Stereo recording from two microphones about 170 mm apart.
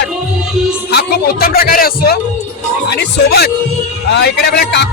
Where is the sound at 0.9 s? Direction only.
65° left (ahead or behind).